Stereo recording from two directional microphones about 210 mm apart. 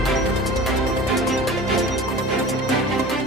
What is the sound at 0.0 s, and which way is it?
Music, centre (ahead or behind).